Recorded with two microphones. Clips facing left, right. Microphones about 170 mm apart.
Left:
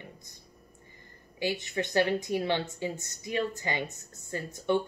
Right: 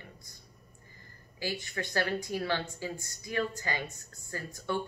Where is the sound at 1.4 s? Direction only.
20° left (ahead or behind).